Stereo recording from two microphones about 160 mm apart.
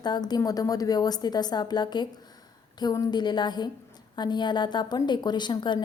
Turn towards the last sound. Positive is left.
turn(degrees=30)  # may be behind; listen again after turning